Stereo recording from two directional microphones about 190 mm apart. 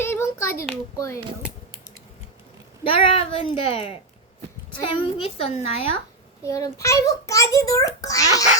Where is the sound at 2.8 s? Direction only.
30° left (ahead or behind).